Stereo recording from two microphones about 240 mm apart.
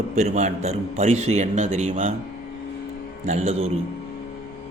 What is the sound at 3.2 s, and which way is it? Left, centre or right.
Speech, right.